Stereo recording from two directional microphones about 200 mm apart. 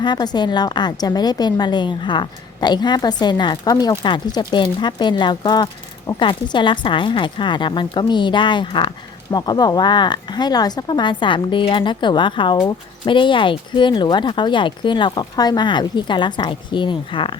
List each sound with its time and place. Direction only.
0.0 s speech: 20° left (ahead or behind)